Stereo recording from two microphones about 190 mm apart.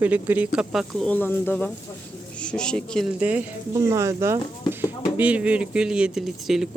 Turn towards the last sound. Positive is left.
turn(degrees=0)  # may be behind; listen again after turning